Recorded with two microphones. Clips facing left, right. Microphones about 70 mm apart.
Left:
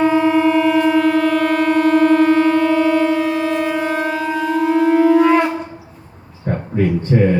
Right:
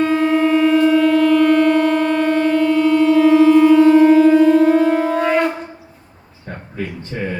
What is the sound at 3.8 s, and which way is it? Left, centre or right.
Shofar, left.